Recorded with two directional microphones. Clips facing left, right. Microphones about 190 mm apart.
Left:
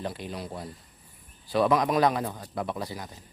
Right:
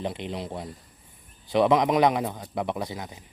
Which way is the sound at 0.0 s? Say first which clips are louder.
Right 3 dB; 20° right (ahead or behind).